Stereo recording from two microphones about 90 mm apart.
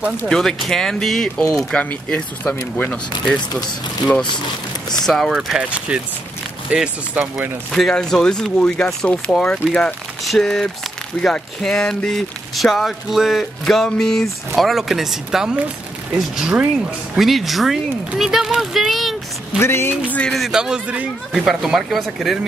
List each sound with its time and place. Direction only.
0.3 s speech: 5° left (ahead or behind)
5.0 s speech: centre (ahead or behind)
7.7 s speech: 5° left (ahead or behind)
19.6 s a sound: 25° left (ahead or behind)
20.3 s speech: 5° right (ahead or behind)